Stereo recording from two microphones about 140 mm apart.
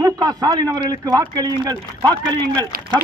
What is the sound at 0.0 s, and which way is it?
Speech, 25° right (ahead or behind).